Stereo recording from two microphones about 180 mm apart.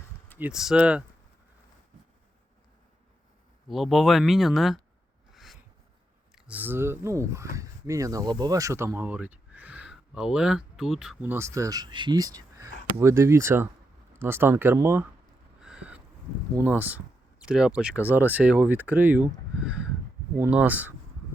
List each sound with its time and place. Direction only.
0.3 s speech: 5° right (ahead or behind)
3.7 s speech: centre (ahead or behind)
5.3 s a sound: centre (ahead or behind)
6.3 s speech: 10° right (ahead or behind)
15.6 s a sound: 5° right (ahead or behind)
16.6 s speech: 10° right (ahead or behind)
20.4 s speech: 10° right (ahead or behind)